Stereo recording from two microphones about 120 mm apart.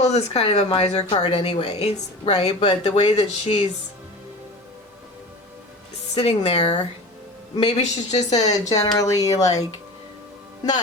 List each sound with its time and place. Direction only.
0.0 s a woman's voice: 65° left (ahead or behind)
6.1 s a woman's voice: 55° left (ahead or behind)
6.6 s speech: 40° left (ahead or behind)
7.5 s a man's voice: 55° left (ahead or behind)
7.8 s speech: 70° left (ahead or behind)
8.4 s speech: 30° left (ahead or behind)